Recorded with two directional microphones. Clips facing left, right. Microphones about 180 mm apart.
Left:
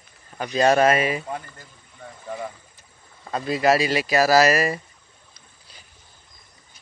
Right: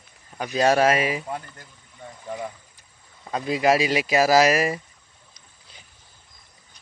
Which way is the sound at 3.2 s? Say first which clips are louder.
Left 1 dB; 10° right (ahead or behind).